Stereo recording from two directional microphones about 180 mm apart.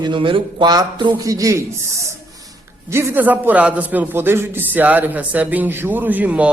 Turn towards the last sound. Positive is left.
turn(degrees=-5)  # may be behind; listen again after turning